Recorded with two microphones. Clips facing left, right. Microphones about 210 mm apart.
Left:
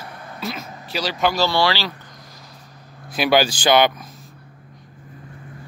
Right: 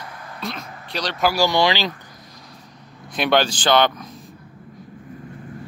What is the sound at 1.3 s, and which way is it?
Speech, 15° right (ahead or behind).